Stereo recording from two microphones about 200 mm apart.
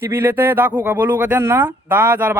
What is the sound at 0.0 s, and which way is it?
Speech, 10° right (ahead or behind).